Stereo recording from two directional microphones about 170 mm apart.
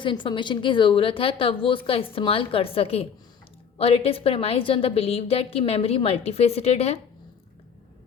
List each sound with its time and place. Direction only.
0.0 s a woman's voice: 30° left (ahead or behind)